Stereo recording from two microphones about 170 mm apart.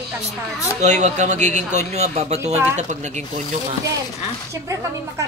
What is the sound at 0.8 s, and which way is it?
Speech, 45° right (ahead or behind).